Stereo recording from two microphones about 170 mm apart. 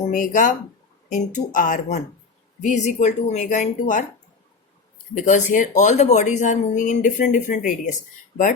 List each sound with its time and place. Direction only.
0.0 s speech: 50° left (ahead or behind)
5.1 s speech: 50° left (ahead or behind)